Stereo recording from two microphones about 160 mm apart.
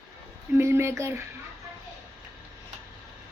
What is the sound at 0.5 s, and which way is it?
Speech, 15° right (ahead or behind).